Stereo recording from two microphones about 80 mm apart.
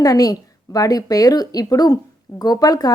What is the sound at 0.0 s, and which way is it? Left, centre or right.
Speech, left.